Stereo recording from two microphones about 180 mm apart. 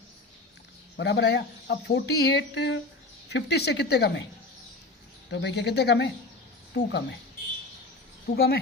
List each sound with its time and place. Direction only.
0.9 s speech: 75° left (ahead or behind)
5.3 s speech: 75° left (ahead or behind)
8.4 s a woman's voice: 65° left (ahead or behind)